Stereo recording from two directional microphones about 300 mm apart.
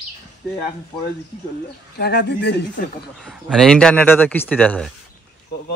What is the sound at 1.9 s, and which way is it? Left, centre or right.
Speech, left.